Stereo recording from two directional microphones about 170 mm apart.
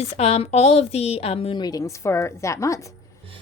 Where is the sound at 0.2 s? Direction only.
40° left (ahead or behind); by 2.8 s 20° left (ahead or behind).